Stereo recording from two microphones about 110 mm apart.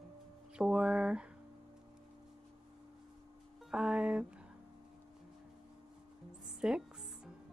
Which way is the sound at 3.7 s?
10° right (ahead or behind).